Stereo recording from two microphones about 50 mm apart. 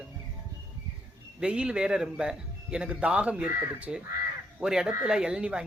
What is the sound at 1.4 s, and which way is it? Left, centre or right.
A man's voice, centre.